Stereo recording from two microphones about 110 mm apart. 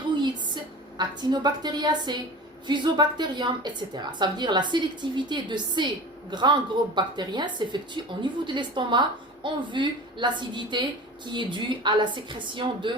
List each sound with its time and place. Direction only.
0.9 s a woman's voice: 40° right (ahead or behind)